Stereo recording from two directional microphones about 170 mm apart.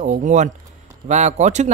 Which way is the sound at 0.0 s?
45° right (ahead or behind).